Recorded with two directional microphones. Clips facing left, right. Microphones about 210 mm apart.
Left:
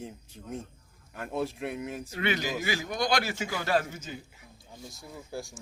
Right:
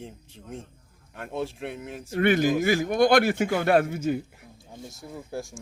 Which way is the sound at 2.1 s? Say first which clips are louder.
Right 10 dB; 50° right (ahead or behind).